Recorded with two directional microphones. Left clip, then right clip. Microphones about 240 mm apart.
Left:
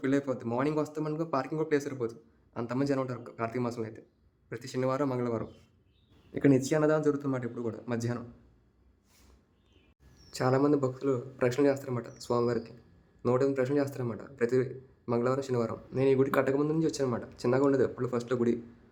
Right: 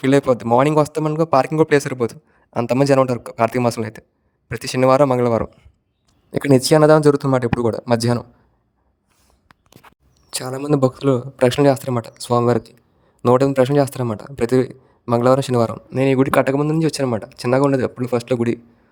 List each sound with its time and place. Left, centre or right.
0.0 s a man's voice: right
10.4 s speech: centre
10.7 s speech: right